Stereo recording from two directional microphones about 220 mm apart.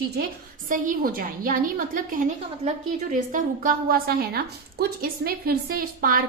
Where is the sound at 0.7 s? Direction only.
40° right (ahead or behind).